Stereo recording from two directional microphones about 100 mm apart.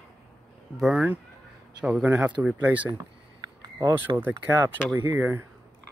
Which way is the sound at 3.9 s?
20° right (ahead or behind).